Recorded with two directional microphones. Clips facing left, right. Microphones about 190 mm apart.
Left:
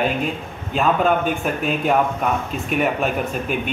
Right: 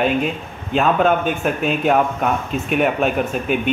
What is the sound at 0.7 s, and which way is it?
Speech, centre (ahead or behind).